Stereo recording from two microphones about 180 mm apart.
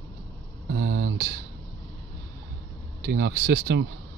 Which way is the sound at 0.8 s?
65° right (ahead or behind).